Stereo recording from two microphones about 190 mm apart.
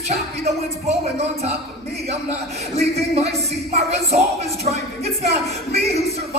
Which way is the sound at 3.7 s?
35° right (ahead or behind).